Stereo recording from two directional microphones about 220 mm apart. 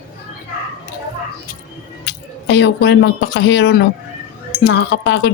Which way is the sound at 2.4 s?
55° left (ahead or behind).